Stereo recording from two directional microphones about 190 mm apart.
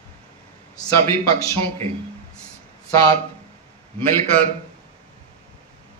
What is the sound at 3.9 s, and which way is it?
Speech, 10° left (ahead or behind).